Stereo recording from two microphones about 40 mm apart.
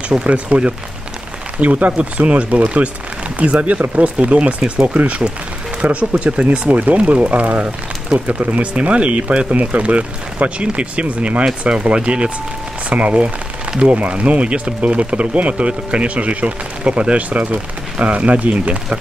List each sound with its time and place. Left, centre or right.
0.1 s speech: right
1.6 s speech: right
3.9 s speech: right